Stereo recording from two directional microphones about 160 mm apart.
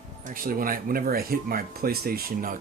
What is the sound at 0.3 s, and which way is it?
Speech, 60° right (ahead or behind).